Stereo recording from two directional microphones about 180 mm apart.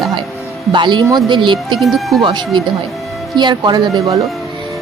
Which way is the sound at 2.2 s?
25° right (ahead or behind).